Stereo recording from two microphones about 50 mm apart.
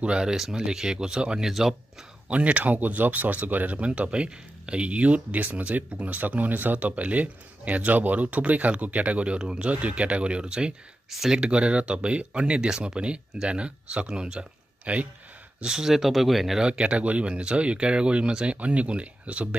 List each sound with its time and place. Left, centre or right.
0.0 s speech: centre
2.2 s speech: right
11.1 s speech: centre
11.3 s speech: right
15.6 s speech: centre
16.6 s speech: right